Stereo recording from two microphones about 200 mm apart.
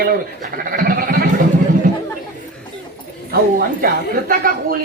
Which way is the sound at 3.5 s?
45° right (ahead or behind).